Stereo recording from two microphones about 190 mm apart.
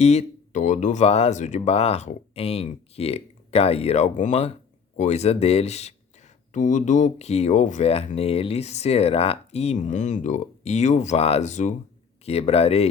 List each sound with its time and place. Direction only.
0.0 s speech: 35° left (ahead or behind)